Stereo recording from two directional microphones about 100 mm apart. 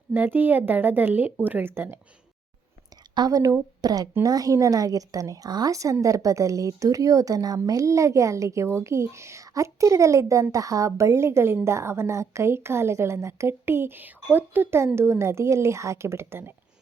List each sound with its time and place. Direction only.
0.1 s a woman's voice: 20° right (ahead or behind)
3.2 s a woman's voice: 35° right (ahead or behind)